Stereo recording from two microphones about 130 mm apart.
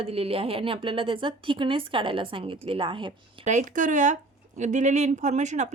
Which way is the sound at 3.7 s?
85° right.